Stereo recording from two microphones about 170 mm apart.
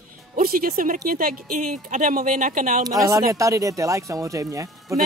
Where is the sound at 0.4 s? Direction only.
60° right (ahead or behind).